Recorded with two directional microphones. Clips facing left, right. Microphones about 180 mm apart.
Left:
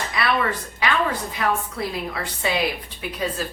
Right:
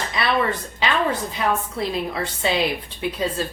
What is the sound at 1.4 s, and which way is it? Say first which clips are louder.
Speech: left 1 dB; 25° right (ahead or behind).